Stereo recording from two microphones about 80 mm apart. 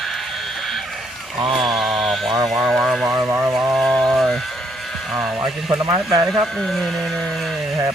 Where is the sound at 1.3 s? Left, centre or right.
Right.